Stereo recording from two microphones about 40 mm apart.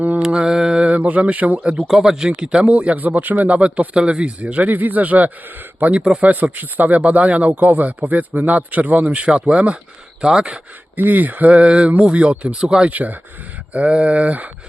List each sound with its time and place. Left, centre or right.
0.4 s mantra: centre
0.9 s speech: right
1.8 s speech: centre; by 2.7 s right
2.7 s speech: right
4.7 s speech: right; by 10.6 s centre
10.9 s speech: right
12.5 s speech: centre
12.9 s speech: right
13.7 s speech: right